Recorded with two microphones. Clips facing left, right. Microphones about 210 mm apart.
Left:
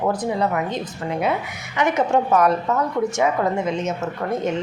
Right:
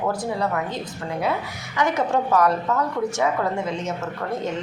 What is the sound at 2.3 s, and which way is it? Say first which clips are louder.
A woman's voice: left 2 dB; 20° left (ahead or behind).